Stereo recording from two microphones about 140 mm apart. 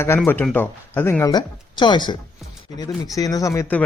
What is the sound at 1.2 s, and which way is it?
Speech, 30° left (ahead or behind).